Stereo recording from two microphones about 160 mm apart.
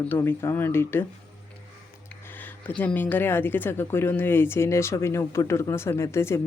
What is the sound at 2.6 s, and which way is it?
Speech, 10° left (ahead or behind).